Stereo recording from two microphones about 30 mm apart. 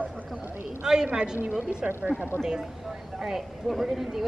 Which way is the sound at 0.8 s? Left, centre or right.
Centre.